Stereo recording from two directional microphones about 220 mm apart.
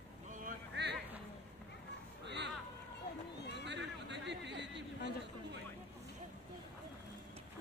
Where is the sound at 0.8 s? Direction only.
50° right (ahead or behind).